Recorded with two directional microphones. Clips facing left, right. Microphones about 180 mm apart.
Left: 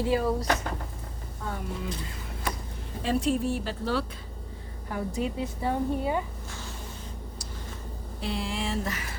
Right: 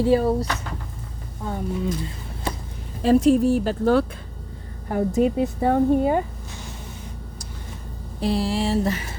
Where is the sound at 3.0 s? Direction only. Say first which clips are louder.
Right 10 dB; 45° right (ahead or behind).